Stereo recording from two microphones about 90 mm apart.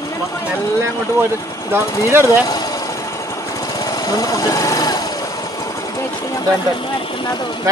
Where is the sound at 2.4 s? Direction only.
45° left (ahead or behind).